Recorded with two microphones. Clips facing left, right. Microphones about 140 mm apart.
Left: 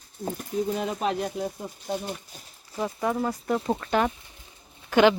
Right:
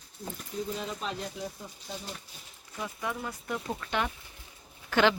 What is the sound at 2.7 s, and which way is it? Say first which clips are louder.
Speech: left 9 dB; 40° left (ahead or behind).